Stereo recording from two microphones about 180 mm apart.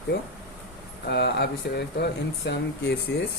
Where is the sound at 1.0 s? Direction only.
70° left (ahead or behind).